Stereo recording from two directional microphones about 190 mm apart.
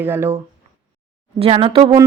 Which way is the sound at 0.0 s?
10° right (ahead or behind).